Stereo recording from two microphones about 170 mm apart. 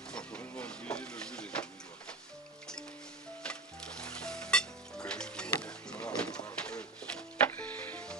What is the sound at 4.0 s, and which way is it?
Sizzle, 5° left (ahead or behind).